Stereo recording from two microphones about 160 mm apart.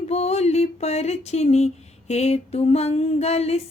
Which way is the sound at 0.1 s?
40° left (ahead or behind).